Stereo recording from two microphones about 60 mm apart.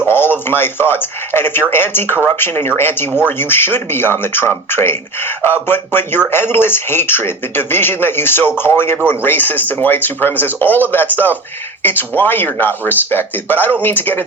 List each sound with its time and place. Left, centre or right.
0.1 s speech: left